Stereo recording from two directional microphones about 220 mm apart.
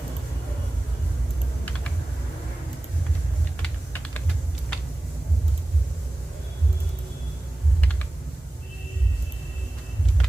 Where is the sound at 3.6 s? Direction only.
10° left (ahead or behind).